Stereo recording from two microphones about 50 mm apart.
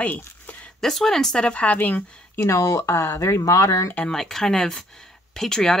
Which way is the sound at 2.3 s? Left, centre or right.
Left.